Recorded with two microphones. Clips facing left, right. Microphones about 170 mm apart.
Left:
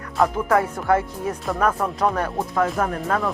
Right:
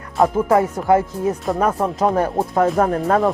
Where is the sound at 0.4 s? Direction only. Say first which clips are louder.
Right 4 dB; 25° right (ahead or behind).